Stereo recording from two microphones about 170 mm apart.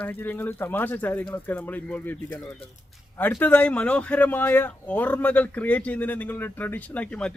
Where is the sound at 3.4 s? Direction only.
10° left (ahead or behind).